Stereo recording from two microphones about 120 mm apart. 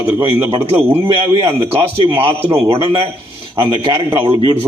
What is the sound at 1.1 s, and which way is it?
A man's voice, 50° right (ahead or behind).